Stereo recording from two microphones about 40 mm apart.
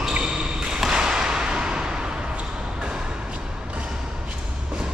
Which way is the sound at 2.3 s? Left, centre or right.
Right.